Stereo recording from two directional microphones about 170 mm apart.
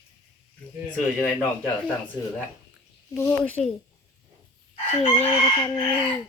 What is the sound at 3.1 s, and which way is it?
Speech, 15° left (ahead or behind).